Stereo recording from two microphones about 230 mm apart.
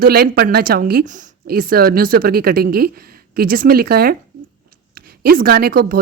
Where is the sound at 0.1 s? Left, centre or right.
Right.